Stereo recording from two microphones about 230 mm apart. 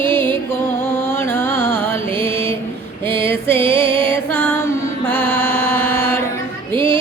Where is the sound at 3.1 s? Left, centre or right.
Centre.